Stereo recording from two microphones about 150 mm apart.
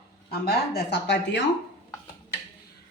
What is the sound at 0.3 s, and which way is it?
Speech, 90° left.